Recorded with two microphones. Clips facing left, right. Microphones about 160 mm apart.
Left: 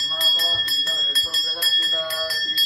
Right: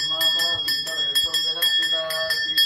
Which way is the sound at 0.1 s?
10° right (ahead or behind).